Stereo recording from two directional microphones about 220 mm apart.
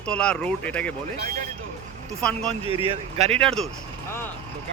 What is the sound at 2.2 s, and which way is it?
Speech, 5° left (ahead or behind).